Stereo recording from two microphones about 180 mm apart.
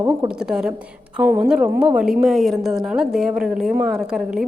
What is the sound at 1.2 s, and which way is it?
A woman's voice, 5° right (ahead or behind).